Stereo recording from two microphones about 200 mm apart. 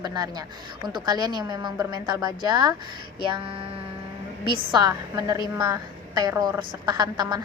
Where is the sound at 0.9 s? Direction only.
20° right (ahead or behind).